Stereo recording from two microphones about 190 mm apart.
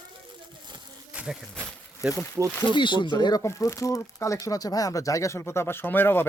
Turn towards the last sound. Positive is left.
turn(degrees=10)  # may be behind; listen again after turning